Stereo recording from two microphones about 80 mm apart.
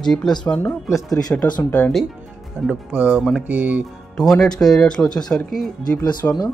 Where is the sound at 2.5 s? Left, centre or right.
Centre.